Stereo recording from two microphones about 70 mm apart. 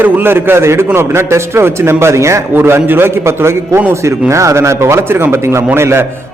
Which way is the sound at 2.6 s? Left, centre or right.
Right.